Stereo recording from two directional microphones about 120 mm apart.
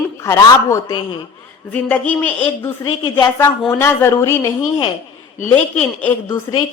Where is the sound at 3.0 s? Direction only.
45° left (ahead or behind).